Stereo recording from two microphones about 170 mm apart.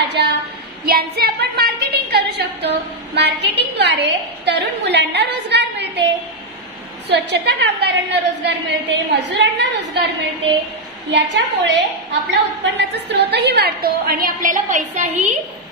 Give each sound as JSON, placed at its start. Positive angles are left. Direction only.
{"t": 0.2, "sound": "child singing", "side_deg": -80}
{"t": 0.8, "sound": "a woman's voice", "side_deg": -65}
{"t": 3.2, "sound": "a woman's voice", "side_deg": -90}
{"t": 7.1, "sound": "a woman's voice", "side_deg": -85}
{"t": 11.1, "sound": "a woman's voice", "side_deg": -90}